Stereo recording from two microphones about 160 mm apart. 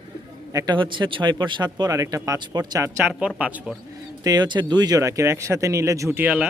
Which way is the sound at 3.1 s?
5° right (ahead or behind).